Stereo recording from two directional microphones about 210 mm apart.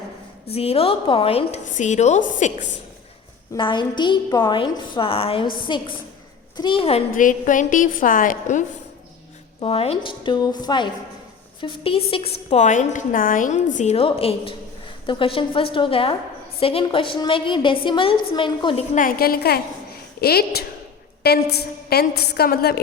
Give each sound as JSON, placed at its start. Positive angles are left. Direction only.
{"t": 0.5, "sound": "a woman's voice", "side_deg": 30}
{"t": 3.5, "sound": "a woman's voice", "side_deg": 20}
{"t": 7.1, "sound": "a woman's voice", "side_deg": 40}
{"t": 9.6, "sound": "a woman's voice", "side_deg": 25}
{"t": 18.9, "sound": "a woman's voice", "side_deg": 45}